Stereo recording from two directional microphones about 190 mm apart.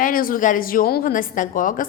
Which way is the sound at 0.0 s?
45° left (ahead or behind).